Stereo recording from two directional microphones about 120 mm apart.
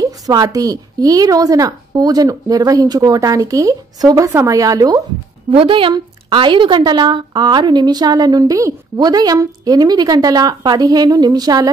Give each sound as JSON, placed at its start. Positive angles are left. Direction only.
{"t": 0.0, "sound": "speech", "side_deg": -30}
{"t": 5.5, "sound": "a woman's voice", "side_deg": -50}